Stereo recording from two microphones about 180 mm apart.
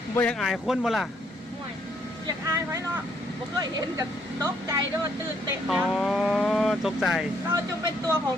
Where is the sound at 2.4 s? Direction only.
15° right (ahead or behind).